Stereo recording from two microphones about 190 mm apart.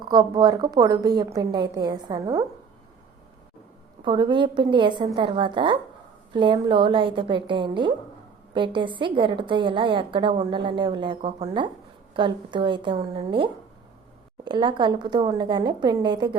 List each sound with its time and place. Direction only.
0.0 s a woman's voice: 20° right (ahead or behind)
4.0 s a woman's voice: 25° right (ahead or behind)